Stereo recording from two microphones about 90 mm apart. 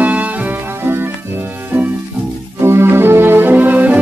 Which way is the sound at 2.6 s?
30° right (ahead or behind).